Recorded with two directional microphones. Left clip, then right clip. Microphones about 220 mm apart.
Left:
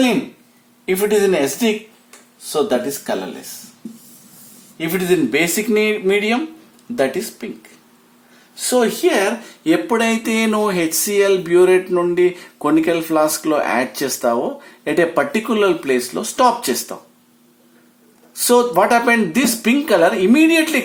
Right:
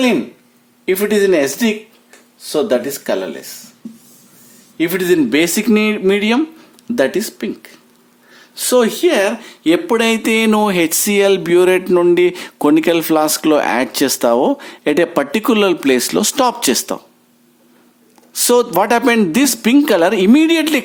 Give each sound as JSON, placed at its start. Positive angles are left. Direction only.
{"t": 0.9, "sound": "speech", "side_deg": -45}
{"t": 4.8, "sound": "speech", "side_deg": -50}
{"t": 18.3, "sound": "speech", "side_deg": -40}